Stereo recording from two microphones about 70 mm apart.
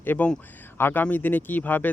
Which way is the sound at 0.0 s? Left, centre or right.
Left.